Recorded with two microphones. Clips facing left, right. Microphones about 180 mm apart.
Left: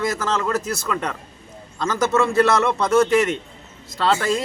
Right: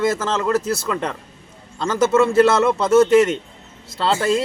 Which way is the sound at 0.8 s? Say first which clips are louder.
Right 2 dB; 25° right (ahead or behind).